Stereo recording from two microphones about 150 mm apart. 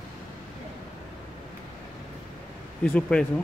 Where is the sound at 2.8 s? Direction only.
5° left (ahead or behind).